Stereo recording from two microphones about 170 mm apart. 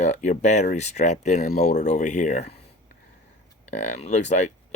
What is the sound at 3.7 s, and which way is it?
Speech, 40° left (ahead or behind).